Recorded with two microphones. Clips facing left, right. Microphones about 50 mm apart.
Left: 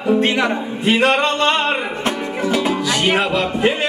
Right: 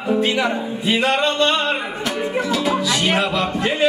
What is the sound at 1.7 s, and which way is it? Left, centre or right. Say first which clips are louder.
Music: left 2 dB; left.